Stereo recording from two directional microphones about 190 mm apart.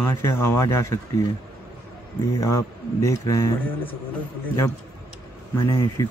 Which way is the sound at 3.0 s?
15° left (ahead or behind).